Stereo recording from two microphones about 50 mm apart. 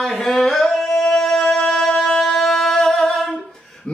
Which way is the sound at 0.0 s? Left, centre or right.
Centre.